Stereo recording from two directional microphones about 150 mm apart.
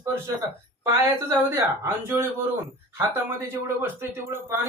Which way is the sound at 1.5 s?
15° right (ahead or behind).